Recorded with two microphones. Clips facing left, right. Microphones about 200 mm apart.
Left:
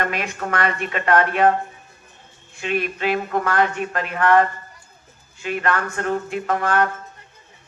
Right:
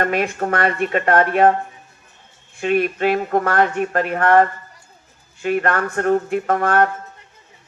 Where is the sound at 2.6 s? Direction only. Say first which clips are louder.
Right 6 dB; 45° right (ahead or behind).